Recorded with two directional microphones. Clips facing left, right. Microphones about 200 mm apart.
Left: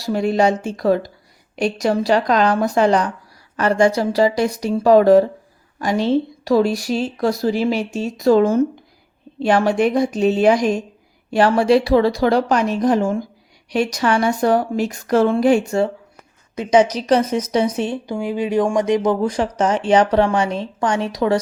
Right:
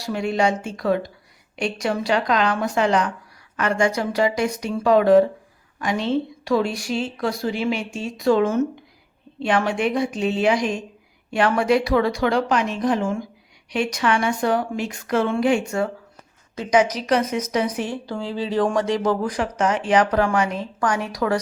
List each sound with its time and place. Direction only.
0.0 s a woman's voice: 35° left (ahead or behind); by 19.3 s 20° left (ahead or behind)
19.3 s a woman's voice: 30° left (ahead or behind)